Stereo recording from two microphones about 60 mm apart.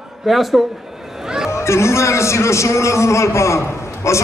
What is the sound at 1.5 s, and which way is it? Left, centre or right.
A man's voice, left.